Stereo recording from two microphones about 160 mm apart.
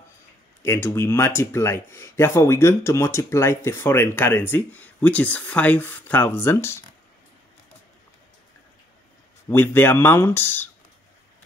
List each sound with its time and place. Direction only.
0.6 s speech: 15° left (ahead or behind)
9.5 s speech: 15° left (ahead or behind)